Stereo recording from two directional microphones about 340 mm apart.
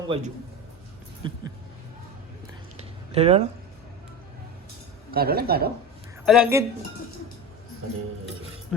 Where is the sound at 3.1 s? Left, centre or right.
Centre.